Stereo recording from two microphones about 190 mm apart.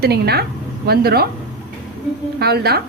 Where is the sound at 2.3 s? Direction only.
55° right (ahead or behind).